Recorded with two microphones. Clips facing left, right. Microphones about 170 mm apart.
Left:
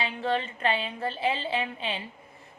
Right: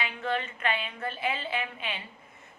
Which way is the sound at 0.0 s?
30° left (ahead or behind).